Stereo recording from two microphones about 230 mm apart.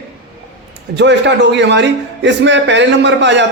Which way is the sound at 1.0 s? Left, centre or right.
Right.